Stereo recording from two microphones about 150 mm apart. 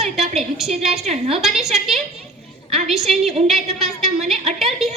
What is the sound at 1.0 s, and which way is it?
Speech, 45° right (ahead or behind).